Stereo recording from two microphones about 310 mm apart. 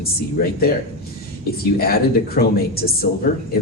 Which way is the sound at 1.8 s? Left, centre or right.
Left.